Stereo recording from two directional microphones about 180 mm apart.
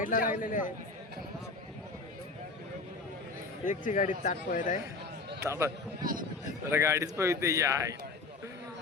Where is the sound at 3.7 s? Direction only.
45° left (ahead or behind).